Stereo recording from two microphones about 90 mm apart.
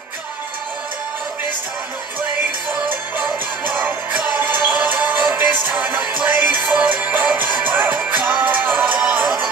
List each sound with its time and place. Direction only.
2.7 s music: 20° right (ahead or behind)